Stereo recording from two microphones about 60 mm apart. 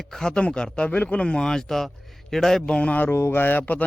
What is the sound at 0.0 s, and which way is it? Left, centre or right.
Speech, centre.